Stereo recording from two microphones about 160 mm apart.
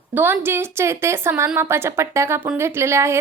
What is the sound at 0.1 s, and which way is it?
A woman's voice, 10° right (ahead or behind).